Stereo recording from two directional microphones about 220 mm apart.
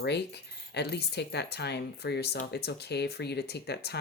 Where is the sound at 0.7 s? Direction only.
50° left (ahead or behind).